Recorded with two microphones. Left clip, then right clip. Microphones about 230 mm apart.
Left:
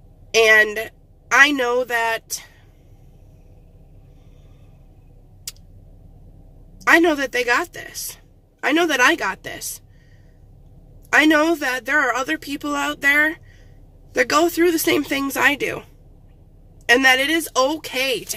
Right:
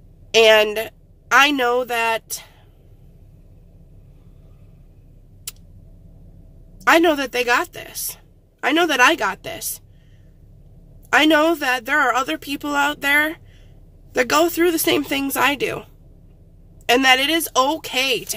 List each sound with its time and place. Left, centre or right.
0.3 s a woman's voice: centre
6.8 s speech: centre
11.1 s speech: centre